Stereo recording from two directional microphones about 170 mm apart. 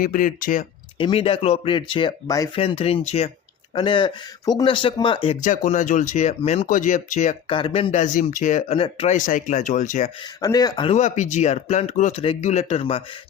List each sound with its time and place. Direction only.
0.0 s speech: 55° left (ahead or behind)
0.9 s speech: 30° left (ahead or behind)
2.6 s speech: 35° left (ahead or behind)
5.4 s speech: 45° left (ahead or behind)
7.5 s speech: 35° left (ahead or behind)
8.7 s speech: 35° left (ahead or behind)
9.1 s speech: 50° left (ahead or behind)
10.4 s speech: 20° left (ahead or behind)
10.9 s speech: 45° left (ahead or behind)